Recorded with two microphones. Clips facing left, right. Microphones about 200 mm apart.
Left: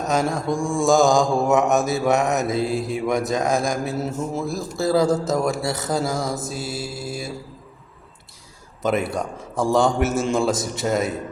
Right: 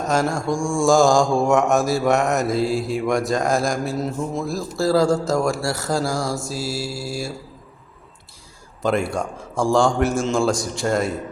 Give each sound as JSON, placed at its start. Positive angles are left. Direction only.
{"t": 0.0, "sound": "mantra", "side_deg": 0}
{"t": 6.2, "sound": "mantra", "side_deg": 20}
{"t": 6.5, "sound": "mantra", "side_deg": 0}
{"t": 8.8, "sound": "mantra", "side_deg": 0}